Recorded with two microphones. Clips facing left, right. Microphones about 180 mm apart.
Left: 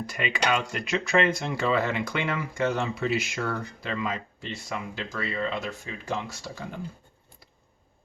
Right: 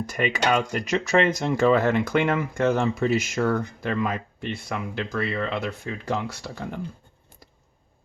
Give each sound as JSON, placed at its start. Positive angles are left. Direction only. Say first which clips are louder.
{"t": 0.0, "sound": "speech", "louder": "right 4 dB", "side_deg": -45}